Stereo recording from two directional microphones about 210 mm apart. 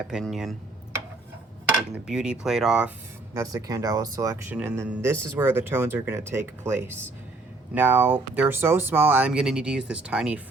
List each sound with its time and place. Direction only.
0.1 s speech: centre (ahead or behind)
2.0 s speech: 5° right (ahead or behind)
3.3 s speech: 15° right (ahead or behind)